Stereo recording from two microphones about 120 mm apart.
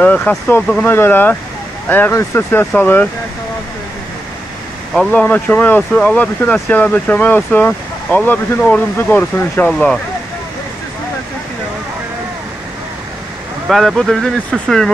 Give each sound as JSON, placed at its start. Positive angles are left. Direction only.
{"t": 0.0, "sound": "speech", "side_deg": 10}
{"t": 4.9, "sound": "speech", "side_deg": 10}
{"t": 9.7, "sound": "speech", "side_deg": 5}
{"t": 13.7, "sound": "speech", "side_deg": 0}